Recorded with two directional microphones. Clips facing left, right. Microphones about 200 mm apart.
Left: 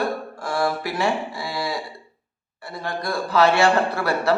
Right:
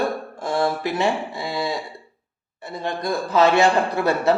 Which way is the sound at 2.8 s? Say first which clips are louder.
Right 2 dB; 20° right (ahead or behind).